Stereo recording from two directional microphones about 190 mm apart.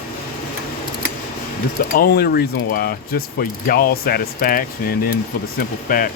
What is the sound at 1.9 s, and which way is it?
Ratchet, 55° left (ahead or behind).